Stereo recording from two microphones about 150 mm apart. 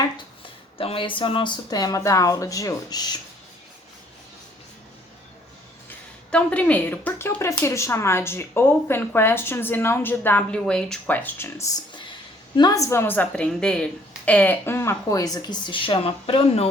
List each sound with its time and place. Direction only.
0.8 s speech: 35° left (ahead or behind)
6.3 s speech: 10° left (ahead or behind); by 16.6 s 40° left (ahead or behind)